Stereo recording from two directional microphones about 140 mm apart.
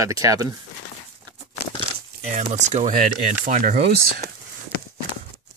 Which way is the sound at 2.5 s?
55° right (ahead or behind).